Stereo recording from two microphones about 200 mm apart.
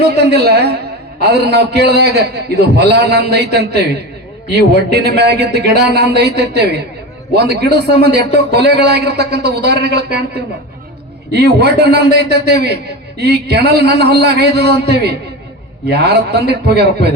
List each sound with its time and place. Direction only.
0.3 s a woman's voice: 55° right (ahead or behind)